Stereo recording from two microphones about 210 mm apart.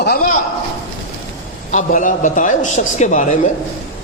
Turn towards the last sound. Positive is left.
turn(degrees=35)  # may be behind; listen again after turning